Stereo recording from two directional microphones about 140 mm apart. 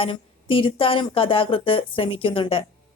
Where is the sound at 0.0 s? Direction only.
40° left (ahead or behind).